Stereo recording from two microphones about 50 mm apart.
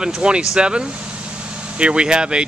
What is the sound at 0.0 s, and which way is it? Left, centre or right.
Speech, centre.